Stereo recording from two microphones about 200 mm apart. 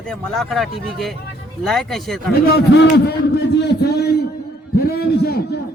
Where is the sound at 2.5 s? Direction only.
55° left (ahead or behind).